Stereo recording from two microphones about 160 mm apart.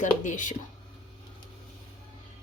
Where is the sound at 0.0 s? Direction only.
50° left (ahead or behind).